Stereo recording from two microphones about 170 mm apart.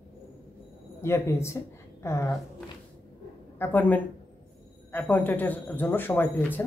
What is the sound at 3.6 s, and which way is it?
Speech, 10° left (ahead or behind).